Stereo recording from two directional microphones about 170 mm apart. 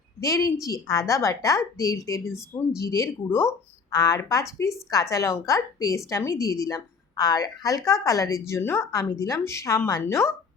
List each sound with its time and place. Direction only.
0.2 s a woman's voice: 20° left (ahead or behind)